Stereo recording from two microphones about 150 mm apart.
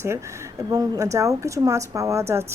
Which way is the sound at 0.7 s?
25° right (ahead or behind).